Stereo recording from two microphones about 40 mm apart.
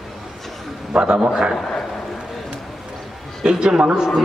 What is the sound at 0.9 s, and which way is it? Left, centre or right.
Speech, centre.